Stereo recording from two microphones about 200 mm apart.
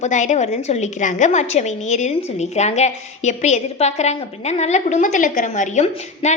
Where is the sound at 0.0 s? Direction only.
35° left (ahead or behind).